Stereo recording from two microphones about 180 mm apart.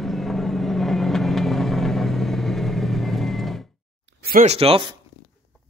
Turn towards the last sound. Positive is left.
turn(degrees=-30)  # may be behind; listen again after turning